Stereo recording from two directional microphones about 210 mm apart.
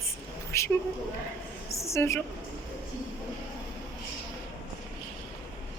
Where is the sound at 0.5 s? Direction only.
15° left (ahead or behind).